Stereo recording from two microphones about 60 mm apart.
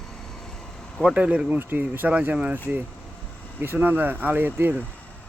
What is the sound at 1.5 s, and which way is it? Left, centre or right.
Speech, right.